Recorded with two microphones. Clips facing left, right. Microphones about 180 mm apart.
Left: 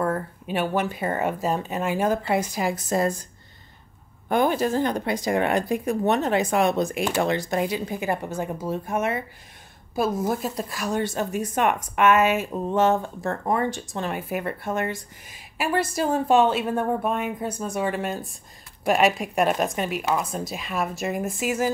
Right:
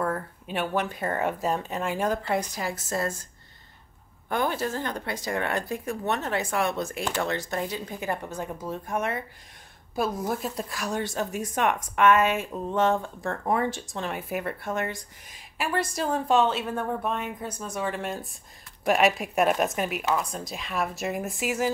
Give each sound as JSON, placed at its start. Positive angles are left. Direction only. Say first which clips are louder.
{"t": 0.0, "sound": "speech", "louder": "left 3 dB", "side_deg": 5}
{"t": 4.3, "sound": "speech", "louder": "left 6 dB", "side_deg": 15}
{"t": 12.4, "sound": "speech", "louder": "left 3 dB", "side_deg": 15}